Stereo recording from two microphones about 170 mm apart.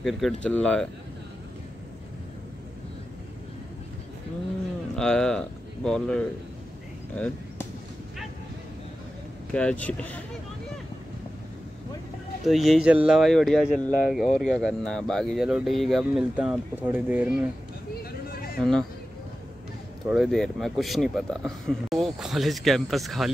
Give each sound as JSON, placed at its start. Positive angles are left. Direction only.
{"t": 0.0, "sound": "speech", "side_deg": 0}
{"t": 4.9, "sound": "speech", "side_deg": 5}
{"t": 9.5, "sound": "speech", "side_deg": 5}
{"t": 12.4, "sound": "speech", "side_deg": 0}
{"t": 18.3, "sound": "a sound", "side_deg": 60}
{"t": 18.6, "sound": "speech", "side_deg": 5}
{"t": 20.1, "sound": "speech", "side_deg": 0}